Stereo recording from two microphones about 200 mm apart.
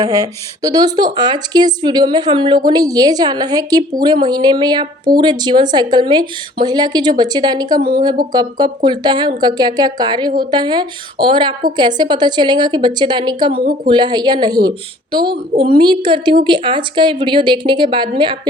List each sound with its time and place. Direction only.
0.0 s speech: 15° right (ahead or behind)